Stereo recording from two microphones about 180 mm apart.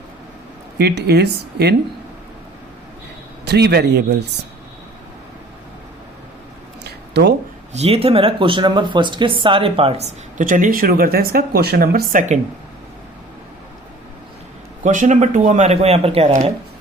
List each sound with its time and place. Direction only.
0.8 s speech: 65° right (ahead or behind)
3.4 s speech: 65° right (ahead or behind)
7.1 s speech: 65° right (ahead or behind)
7.7 s speech: 35° right (ahead or behind)
14.8 s speech: 45° right (ahead or behind)